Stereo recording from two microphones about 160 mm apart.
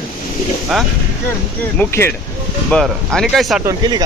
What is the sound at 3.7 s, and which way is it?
Speech, 25° right (ahead or behind).